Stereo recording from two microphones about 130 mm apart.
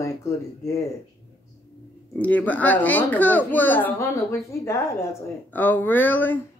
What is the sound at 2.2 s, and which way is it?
Speech, 10° left (ahead or behind).